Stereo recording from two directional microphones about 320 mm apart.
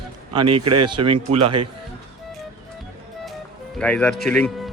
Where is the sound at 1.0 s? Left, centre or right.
Centre.